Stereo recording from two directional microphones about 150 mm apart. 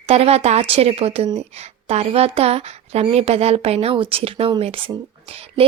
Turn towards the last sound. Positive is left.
turn(degrees=-40)  # may be behind; listen again after turning